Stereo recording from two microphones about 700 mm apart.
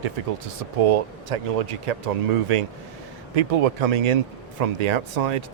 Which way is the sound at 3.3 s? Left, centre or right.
Right.